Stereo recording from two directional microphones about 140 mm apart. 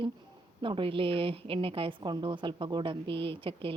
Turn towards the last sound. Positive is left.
turn(degrees=-40)  # may be behind; listen again after turning